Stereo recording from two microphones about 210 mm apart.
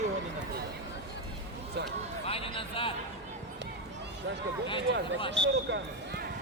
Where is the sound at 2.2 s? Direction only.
25° left (ahead or behind).